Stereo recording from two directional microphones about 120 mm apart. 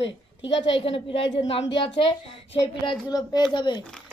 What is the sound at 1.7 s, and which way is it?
A child's voice, 45° left (ahead or behind).